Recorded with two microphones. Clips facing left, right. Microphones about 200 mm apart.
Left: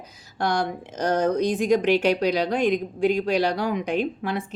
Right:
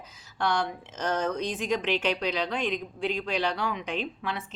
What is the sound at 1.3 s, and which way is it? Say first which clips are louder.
Speech: left 9 dB; 10° left (ahead or behind).